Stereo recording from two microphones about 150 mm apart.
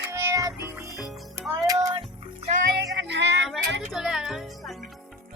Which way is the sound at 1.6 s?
25° right (ahead or behind).